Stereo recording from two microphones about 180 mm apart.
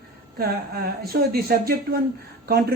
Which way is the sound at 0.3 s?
55° right (ahead or behind).